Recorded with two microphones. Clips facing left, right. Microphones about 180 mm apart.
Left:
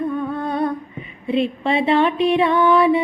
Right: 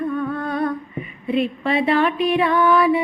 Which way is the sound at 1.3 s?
25° left (ahead or behind).